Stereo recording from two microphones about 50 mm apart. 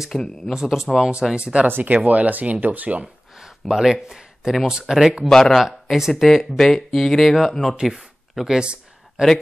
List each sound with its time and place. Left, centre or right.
0.1 s speech: centre
1.3 s speech: right
1.7 s speech: right
3.3 s speech: centre
6.1 s speech: centre
7.7 s speech: centre
8.5 s a sound: centre